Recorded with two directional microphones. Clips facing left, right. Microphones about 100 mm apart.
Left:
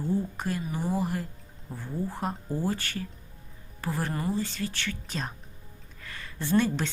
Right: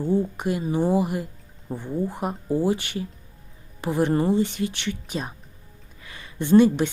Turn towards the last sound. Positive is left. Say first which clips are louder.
# right 9 dB
turn(degrees=-15)  # may be behind; listen again after turning